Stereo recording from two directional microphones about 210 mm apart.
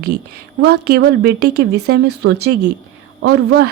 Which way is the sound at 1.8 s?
90° right.